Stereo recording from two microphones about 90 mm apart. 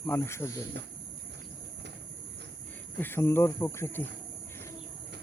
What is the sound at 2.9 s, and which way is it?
Speech, 25° left (ahead or behind).